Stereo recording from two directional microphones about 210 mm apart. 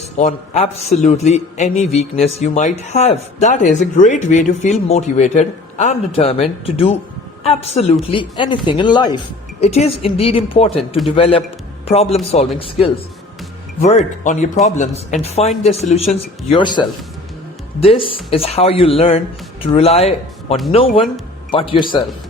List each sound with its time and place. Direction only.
0.2 s a man's voice: 35° left (ahead or behind)